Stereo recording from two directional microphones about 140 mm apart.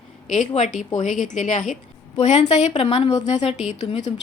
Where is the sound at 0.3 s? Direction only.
60° left (ahead or behind).